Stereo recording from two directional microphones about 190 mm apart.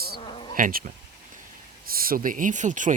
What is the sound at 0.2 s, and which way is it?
Insect, 30° left (ahead or behind).